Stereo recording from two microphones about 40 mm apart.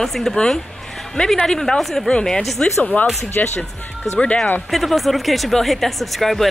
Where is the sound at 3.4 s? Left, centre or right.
Left.